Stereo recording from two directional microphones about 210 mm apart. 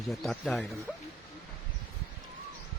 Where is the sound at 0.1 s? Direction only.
Centre (ahead or behind).